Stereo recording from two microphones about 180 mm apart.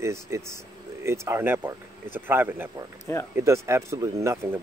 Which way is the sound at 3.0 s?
15° left (ahead or behind).